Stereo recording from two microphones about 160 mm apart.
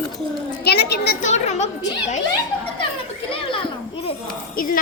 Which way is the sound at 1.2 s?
45° left (ahead or behind).